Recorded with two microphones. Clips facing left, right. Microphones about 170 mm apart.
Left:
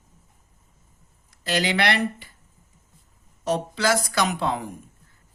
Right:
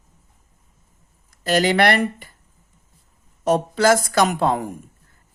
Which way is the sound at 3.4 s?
50° right (ahead or behind).